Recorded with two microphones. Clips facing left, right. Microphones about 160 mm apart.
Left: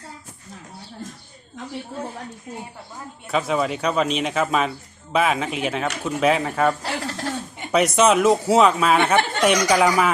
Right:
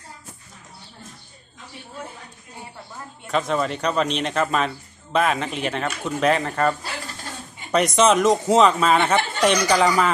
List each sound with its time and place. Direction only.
3.2 s a man's voice: 5° left (ahead or behind)
6.8 s a sound: 85° left
7.7 s a man's voice: 5° left (ahead or behind)